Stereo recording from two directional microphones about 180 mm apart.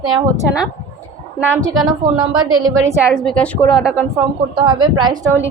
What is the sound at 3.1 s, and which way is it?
Speech, 5° left (ahead or behind).